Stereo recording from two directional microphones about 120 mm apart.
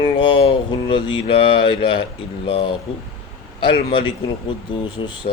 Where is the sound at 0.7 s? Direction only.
45° left (ahead or behind).